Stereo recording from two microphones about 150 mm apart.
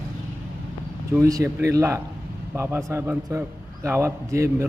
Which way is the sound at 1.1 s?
20° right (ahead or behind).